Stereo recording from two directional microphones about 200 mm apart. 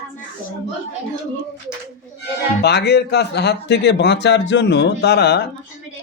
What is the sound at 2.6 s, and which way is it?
Speech, 55° left (ahead or behind).